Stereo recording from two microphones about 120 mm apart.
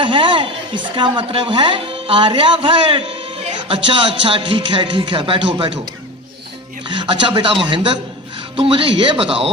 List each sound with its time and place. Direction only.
0.0 s a man's voice: 45° right (ahead or behind)
6.8 s a man's voice: 40° right (ahead or behind)